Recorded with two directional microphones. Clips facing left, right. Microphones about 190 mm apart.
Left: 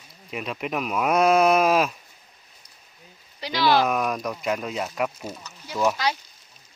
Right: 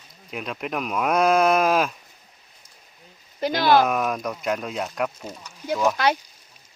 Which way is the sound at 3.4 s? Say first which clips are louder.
Right 3 dB; 50° right (ahead or behind).